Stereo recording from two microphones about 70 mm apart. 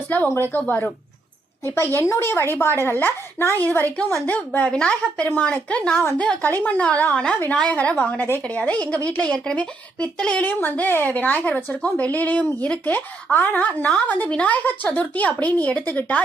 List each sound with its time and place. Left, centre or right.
1.6 s speech: left; by 10.4 s centre
10.4 s speech: left